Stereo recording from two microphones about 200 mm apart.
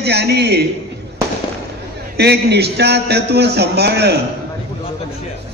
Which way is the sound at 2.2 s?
55° right (ahead or behind).